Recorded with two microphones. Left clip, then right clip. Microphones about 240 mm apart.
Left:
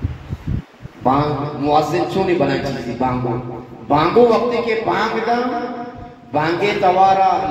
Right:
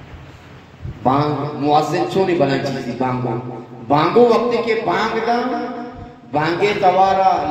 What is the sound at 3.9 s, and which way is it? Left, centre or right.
A man's voice, right.